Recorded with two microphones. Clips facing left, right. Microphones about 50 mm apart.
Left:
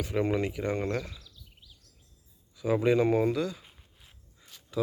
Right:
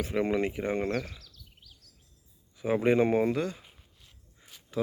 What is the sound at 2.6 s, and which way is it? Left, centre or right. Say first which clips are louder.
Speech: even; right.